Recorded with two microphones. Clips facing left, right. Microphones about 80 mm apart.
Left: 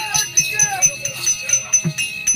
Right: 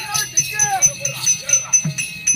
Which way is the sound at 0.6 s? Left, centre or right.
Centre.